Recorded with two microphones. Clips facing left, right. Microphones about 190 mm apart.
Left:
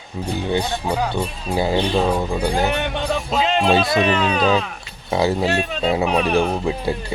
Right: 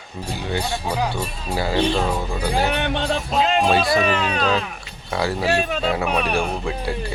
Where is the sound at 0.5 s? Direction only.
20° left (ahead or behind).